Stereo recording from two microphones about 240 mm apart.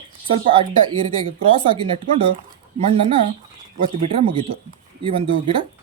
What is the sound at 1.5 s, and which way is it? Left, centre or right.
Speech, right.